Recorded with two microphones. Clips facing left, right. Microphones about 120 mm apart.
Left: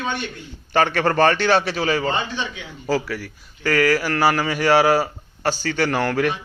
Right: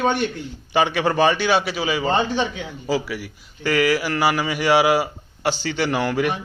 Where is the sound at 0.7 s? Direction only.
10° right (ahead or behind).